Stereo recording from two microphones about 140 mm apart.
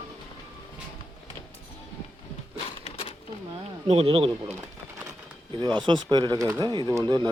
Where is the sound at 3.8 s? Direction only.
45° right (ahead or behind).